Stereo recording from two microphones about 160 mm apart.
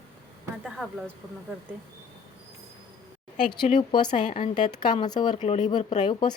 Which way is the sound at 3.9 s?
30° left (ahead or behind).